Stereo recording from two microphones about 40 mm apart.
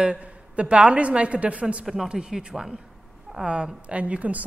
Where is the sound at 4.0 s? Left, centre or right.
Right.